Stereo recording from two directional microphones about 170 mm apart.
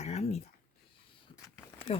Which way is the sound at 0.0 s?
40° left (ahead or behind).